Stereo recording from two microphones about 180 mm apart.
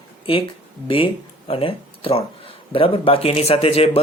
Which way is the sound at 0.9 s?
30° left (ahead or behind).